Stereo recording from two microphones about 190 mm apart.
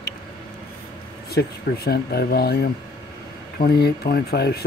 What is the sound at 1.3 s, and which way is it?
Speech, 55° left (ahead or behind).